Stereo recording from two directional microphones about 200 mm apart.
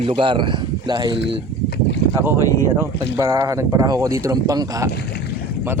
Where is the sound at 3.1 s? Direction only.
15° right (ahead or behind).